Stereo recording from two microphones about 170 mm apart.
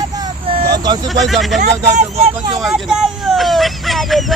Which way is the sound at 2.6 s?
5° right (ahead or behind).